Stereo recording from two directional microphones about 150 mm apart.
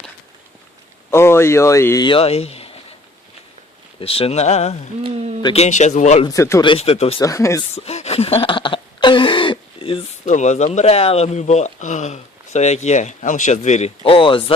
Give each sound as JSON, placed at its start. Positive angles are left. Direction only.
{"t": 1.1, "sound": "speech", "side_deg": 15}
{"t": 2.0, "sound": "speech", "side_deg": 40}
{"t": 4.0, "sound": "speech", "side_deg": 40}
{"t": 5.0, "sound": "speech", "side_deg": -45}
{"t": 5.5, "sound": "speech", "side_deg": 50}
{"t": 6.2, "sound": "speech", "side_deg": 20}
{"t": 6.6, "sound": "speech", "side_deg": 35}
{"t": 7.2, "sound": "speech", "side_deg": 20}
{"t": 7.8, "sound": "a sound", "side_deg": 45}
{"t": 10.2, "sound": "speech", "side_deg": 50}